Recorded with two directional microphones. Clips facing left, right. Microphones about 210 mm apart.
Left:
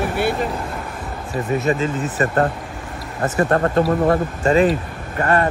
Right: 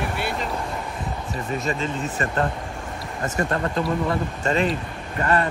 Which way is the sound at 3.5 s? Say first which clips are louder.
Left 9 dB; 55° left (ahead or behind).